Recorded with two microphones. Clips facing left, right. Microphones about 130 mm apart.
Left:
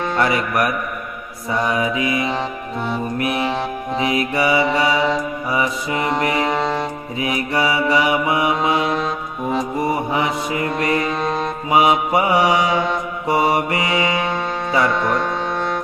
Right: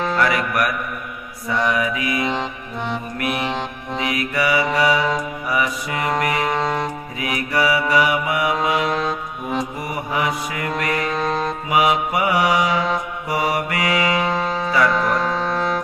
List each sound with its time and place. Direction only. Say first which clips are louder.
0.2 s mantra: left 3 dB; 25° left (ahead or behind)
6.5 s music: left 1 dB; centre (ahead or behind)
7.2 s mantra: left 1 dB; 25° left (ahead or behind)
9.0 s music: left 1 dB; centre (ahead or behind)
9.8 s mantra: left 4 dB; 25° left (ahead or behind)
11.1 s music: even; centre (ahead or behind)
11.7 s mantra: left 3 dB; 25° left (ahead or behind)
14.3 s music: right 1 dB; centre (ahead or behind)